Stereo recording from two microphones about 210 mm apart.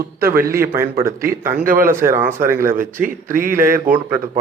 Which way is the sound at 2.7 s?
40° right (ahead or behind).